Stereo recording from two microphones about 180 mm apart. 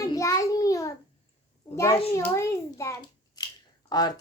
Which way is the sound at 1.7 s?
15° left (ahead or behind).